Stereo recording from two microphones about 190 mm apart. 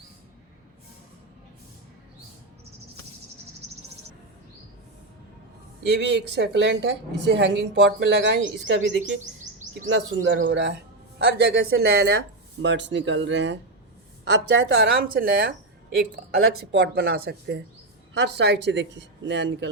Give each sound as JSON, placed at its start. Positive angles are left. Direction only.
{"t": 5.8, "sound": "a woman's voice", "side_deg": -65}
{"t": 11.3, "sound": "a woman's voice", "side_deg": -60}
{"t": 16.7, "sound": "a woman's voice", "side_deg": -60}